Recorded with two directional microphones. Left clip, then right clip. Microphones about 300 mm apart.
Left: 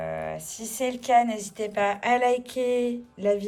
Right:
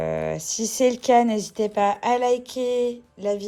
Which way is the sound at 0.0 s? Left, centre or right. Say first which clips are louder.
Right 6 dB; right.